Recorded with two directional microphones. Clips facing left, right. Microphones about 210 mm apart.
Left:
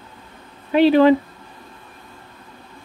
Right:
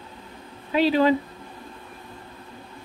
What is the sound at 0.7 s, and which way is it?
Speech, 60° left (ahead or behind).